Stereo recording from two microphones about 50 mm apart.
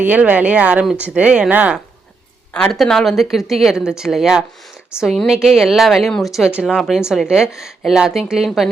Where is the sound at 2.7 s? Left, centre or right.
Centre.